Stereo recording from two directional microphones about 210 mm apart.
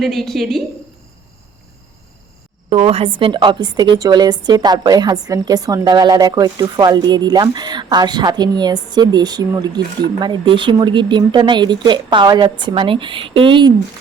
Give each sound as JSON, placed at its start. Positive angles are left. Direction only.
{"t": 0.0, "sound": "a woman's voice", "side_deg": 0}
{"t": 2.6, "sound": "a woman's voice", "side_deg": -30}